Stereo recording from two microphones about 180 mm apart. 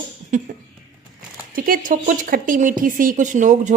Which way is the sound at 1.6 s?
50° right (ahead or behind).